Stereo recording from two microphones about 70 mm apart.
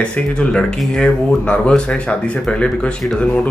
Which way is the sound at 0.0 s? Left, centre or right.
Centre.